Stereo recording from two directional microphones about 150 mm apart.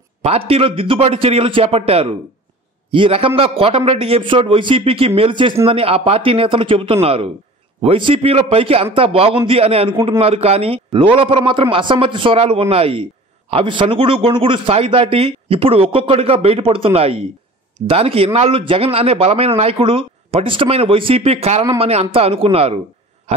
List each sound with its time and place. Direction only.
0.2 s a man's voice: 40° right (ahead or behind)